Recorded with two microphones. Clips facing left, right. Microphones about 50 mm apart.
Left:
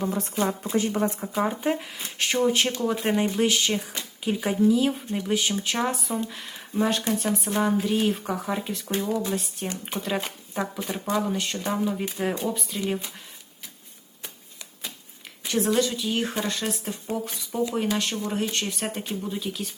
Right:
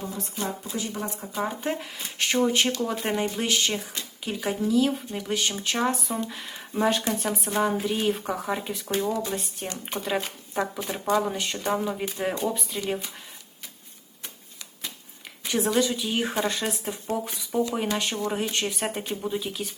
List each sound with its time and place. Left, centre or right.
0.0 s a woman's voice: left
0.3 s speech: left
1.2 s speech: centre
15.4 s speech: centre